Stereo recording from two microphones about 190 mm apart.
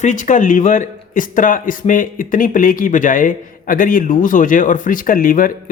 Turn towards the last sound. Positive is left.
turn(degrees=45)  # may be behind; listen again after turning